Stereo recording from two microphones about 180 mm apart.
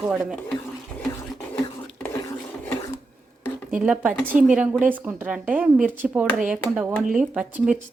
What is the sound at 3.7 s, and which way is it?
A woman's voice, 5° right (ahead or behind).